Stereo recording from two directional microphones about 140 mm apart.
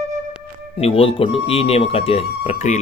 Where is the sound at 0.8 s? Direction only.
45° left (ahead or behind).